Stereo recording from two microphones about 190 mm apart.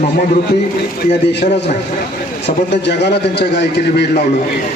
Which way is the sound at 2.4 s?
65° left (ahead or behind).